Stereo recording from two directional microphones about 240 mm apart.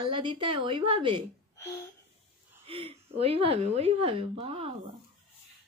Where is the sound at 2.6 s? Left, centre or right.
Right.